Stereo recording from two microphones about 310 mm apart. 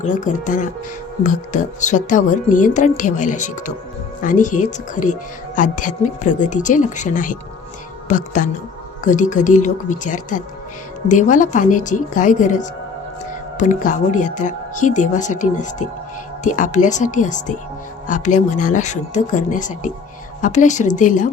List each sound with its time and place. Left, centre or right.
0.0 s speech: left